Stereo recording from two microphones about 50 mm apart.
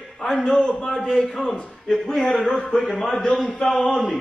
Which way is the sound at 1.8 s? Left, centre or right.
Centre.